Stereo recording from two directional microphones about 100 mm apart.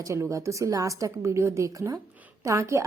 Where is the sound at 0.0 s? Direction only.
30° right (ahead or behind).